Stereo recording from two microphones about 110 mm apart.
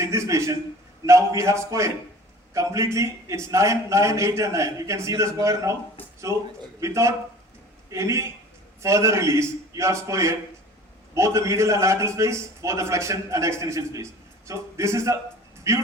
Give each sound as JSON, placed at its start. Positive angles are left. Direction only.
{"t": 0.0, "sound": "a man's voice", "side_deg": -25}
{"t": 6.7, "sound": "a man's voice", "side_deg": -25}